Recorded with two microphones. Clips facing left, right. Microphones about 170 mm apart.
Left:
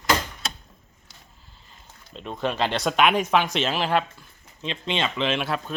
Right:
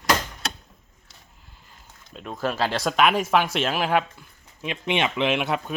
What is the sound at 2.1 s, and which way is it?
Speech, 5° right (ahead or behind).